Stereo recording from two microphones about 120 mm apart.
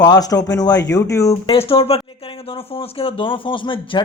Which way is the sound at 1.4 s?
50° left (ahead or behind).